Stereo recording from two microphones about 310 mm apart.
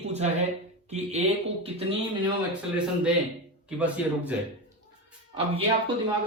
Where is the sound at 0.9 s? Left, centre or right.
Right.